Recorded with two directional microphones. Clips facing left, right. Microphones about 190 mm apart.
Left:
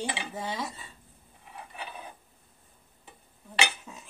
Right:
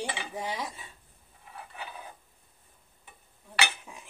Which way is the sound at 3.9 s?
10° right (ahead or behind).